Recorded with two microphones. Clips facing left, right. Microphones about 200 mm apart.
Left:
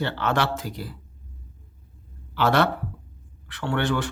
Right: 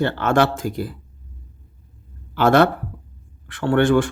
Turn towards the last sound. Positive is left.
turn(degrees=-50)  # may be behind; listen again after turning